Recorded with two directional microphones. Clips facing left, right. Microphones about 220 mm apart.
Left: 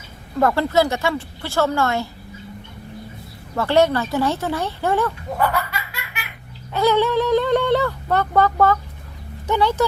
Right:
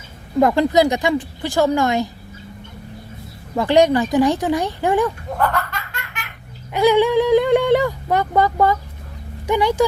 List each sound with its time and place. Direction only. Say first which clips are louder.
0.3 s speech: right 3 dB; 15° right (ahead or behind)
3.5 s speech: right 3 dB; 15° right (ahead or behind)
5.4 s snicker: even; 5° left (ahead or behind)
6.7 s speech: right 3 dB; 15° right (ahead or behind)